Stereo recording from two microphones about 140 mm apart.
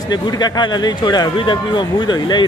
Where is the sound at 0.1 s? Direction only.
30° left (ahead or behind).